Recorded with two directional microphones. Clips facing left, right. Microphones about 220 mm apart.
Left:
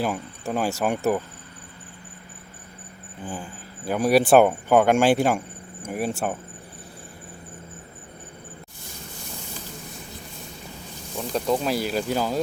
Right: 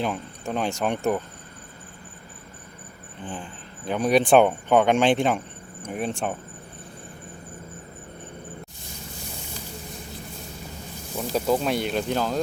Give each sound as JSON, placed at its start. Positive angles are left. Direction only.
{"t": 0.0, "sound": "speech", "side_deg": 5}
{"t": 3.2, "sound": "speech", "side_deg": 10}
{"t": 11.2, "sound": "speech", "side_deg": -5}